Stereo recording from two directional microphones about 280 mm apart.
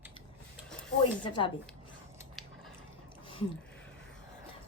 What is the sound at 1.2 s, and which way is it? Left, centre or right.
Speech, centre.